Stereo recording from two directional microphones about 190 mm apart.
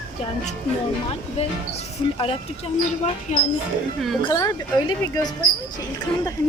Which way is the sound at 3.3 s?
40° left (ahead or behind).